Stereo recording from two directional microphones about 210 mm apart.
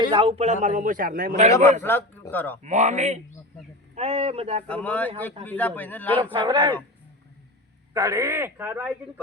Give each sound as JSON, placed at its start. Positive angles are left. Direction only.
{"t": 0.1, "sound": "a man's voice", "side_deg": -25}
{"t": 1.5, "sound": "speech", "side_deg": 15}
{"t": 2.6, "sound": "a man's voice", "side_deg": -35}
{"t": 4.7, "sound": "speech", "side_deg": 5}
{"t": 6.3, "sound": "a man's voice", "side_deg": -20}
{"t": 7.9, "sound": "speech", "side_deg": -15}